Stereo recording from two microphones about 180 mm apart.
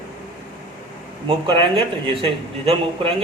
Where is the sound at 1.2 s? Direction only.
30° right (ahead or behind).